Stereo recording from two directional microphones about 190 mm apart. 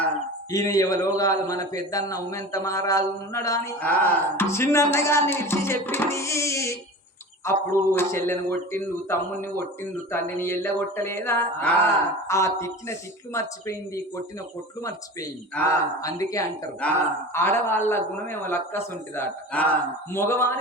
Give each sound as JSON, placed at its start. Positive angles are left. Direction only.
{"t": 0.5, "sound": "a man's voice", "side_deg": 20}
{"t": 17.3, "sound": "a man's voice", "side_deg": 10}